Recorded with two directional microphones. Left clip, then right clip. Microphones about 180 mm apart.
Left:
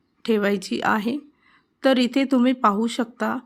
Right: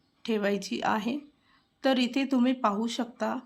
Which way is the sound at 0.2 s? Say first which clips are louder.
Left 7 dB; 30° left (ahead or behind).